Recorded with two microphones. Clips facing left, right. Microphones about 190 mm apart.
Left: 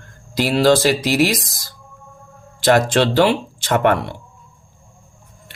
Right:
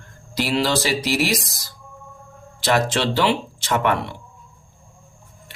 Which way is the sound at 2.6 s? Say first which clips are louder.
Left 5 dB; 50° left (ahead or behind).